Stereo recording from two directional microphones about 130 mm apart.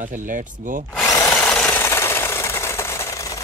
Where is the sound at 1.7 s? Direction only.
20° left (ahead or behind).